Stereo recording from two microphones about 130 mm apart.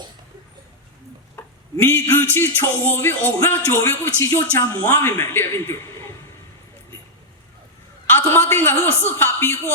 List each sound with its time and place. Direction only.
1.4 s a man's voice: 20° left (ahead or behind)
8.0 s speech: 15° left (ahead or behind)